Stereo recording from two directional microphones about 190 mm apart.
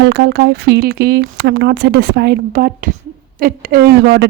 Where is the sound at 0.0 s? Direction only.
60° right (ahead or behind).